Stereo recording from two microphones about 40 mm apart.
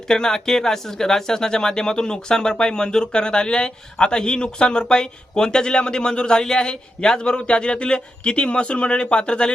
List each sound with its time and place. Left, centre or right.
0.1 s speech: centre